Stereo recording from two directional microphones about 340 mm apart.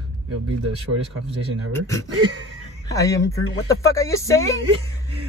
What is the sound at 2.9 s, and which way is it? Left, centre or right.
Speech, centre.